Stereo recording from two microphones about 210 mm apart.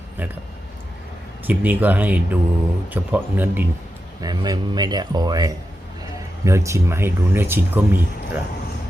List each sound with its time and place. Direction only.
1.5 s a man's voice: 10° right (ahead or behind)